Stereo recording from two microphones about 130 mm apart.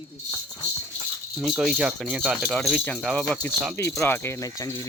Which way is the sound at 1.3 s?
5° right (ahead or behind).